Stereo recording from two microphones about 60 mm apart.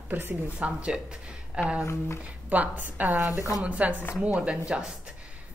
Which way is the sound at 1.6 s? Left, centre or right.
Centre.